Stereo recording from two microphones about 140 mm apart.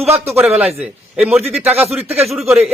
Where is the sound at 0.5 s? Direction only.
5° right (ahead or behind).